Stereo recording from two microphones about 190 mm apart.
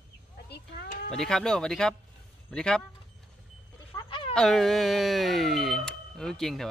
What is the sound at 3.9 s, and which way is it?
Livestock, 25° left (ahead or behind).